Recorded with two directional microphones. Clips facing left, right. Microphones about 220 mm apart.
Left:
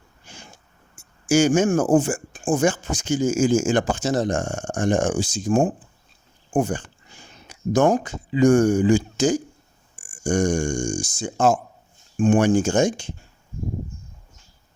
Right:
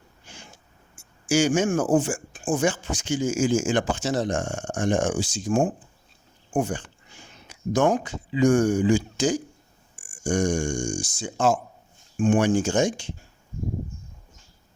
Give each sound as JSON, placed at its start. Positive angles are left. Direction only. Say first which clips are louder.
{"t": 1.3, "sound": "speech", "louder": "left 4 dB", "side_deg": 45}